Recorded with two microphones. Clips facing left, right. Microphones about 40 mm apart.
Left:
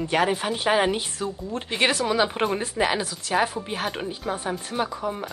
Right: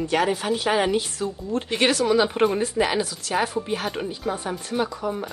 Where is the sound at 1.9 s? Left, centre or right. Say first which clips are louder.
Right 3 dB; centre.